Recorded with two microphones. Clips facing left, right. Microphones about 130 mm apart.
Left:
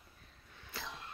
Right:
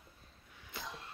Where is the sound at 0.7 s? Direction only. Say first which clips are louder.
Even; 20° right (ahead or behind).